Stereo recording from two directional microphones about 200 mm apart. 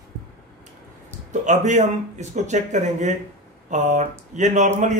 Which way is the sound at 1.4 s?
35° right (ahead or behind).